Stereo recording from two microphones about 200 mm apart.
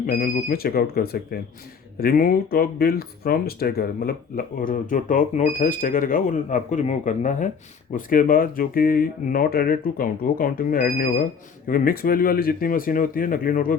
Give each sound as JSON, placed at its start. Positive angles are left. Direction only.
{"t": 0.0, "sound": "speech", "side_deg": 45}